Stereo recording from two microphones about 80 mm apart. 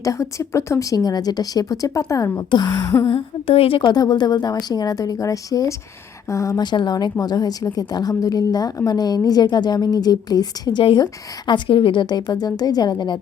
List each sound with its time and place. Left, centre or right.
0.0 s a woman's voice: left
2.5 s a woman's voice: left
3.8 s a woman's voice: left
6.6 s a woman's voice: left